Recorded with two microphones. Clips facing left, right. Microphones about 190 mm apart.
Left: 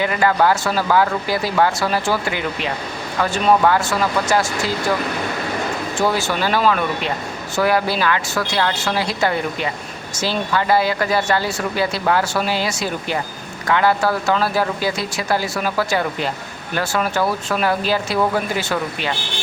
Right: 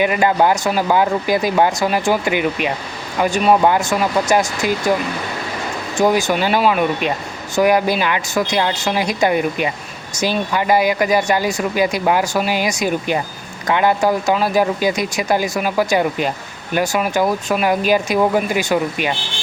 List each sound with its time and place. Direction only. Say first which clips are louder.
0.0 s speech: right 2 dB; 20° right (ahead or behind)
6.0 s speech: right 5 dB; 15° right (ahead or behind)